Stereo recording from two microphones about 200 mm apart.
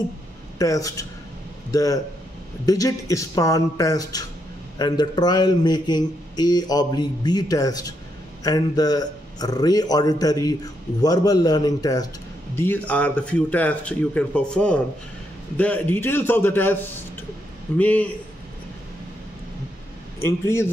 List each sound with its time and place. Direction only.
0.6 s a man's voice: 15° left (ahead or behind)
17.7 s speech: 5° left (ahead or behind)
20.2 s speech: 15° left (ahead or behind)